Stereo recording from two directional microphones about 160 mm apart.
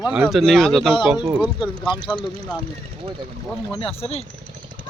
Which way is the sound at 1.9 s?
30° left (ahead or behind).